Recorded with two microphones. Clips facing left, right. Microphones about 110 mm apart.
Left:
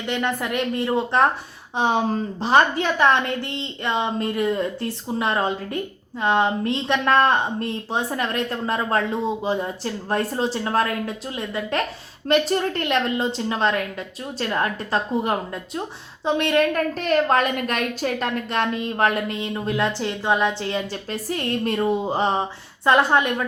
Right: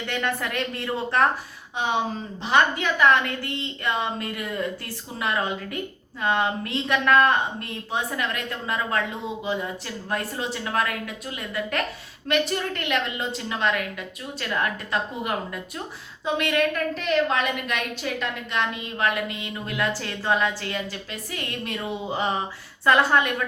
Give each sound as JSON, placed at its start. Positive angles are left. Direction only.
{"t": 0.0, "sound": "a woman's voice", "side_deg": 20}
{"t": 1.7, "sound": "a woman's voice", "side_deg": 35}
{"t": 21.1, "sound": "a woman's voice", "side_deg": 40}